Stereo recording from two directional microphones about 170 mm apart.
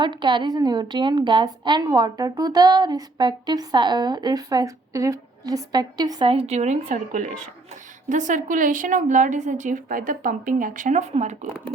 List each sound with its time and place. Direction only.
0.0 s a woman's voice: 25° right (ahead or behind); by 11.3 s 45° right (ahead or behind)